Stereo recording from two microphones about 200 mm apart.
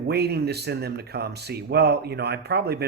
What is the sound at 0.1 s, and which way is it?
Speech, 55° right (ahead or behind).